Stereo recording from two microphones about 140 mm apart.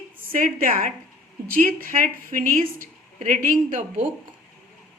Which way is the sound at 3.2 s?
65° right (ahead or behind).